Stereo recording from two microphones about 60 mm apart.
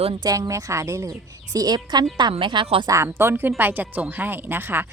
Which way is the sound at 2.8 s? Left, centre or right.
Right.